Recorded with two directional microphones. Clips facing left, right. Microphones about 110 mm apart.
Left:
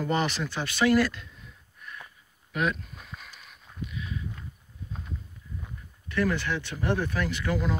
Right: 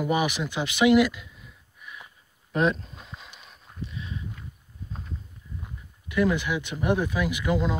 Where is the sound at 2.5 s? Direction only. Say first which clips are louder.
Right 5 dB; 30° right (ahead or behind).